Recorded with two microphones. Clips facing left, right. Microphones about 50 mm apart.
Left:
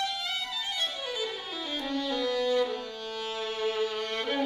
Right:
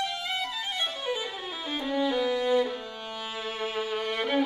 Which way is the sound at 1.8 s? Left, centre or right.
Centre.